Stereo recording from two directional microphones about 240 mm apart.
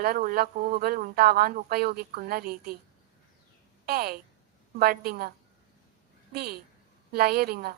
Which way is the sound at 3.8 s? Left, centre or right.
Right.